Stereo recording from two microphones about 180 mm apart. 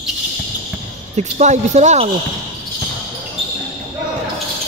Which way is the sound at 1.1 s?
40° right (ahead or behind).